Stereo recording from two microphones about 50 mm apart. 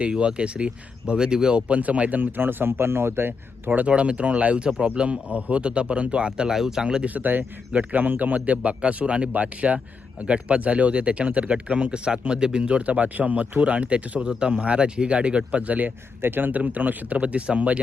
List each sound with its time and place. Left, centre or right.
0.0 s a man's voice: right
3.8 s a man's voice: right
6.8 s a man's voice: right
7.1 s a man's voice: right
16.2 s speech: right